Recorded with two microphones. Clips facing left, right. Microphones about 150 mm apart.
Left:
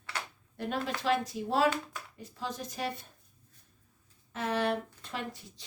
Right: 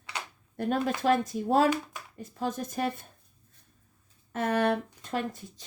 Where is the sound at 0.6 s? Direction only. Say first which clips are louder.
Right 6 dB; 45° right (ahead or behind).